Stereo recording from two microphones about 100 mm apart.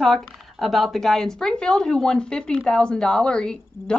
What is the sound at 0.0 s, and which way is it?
A woman's voice, centre (ahead or behind).